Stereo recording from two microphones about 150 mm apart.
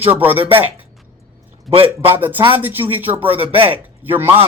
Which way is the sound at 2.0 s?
10° right (ahead or behind).